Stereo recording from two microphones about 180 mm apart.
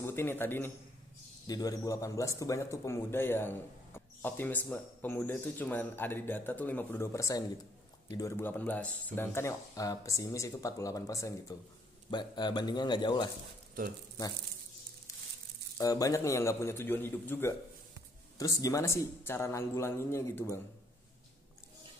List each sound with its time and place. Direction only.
0.0 s speech: 15° left (ahead or behind)
15.8 s speech: 20° left (ahead or behind)